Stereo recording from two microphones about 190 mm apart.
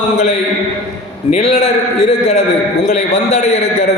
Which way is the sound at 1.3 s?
35° left (ahead or behind).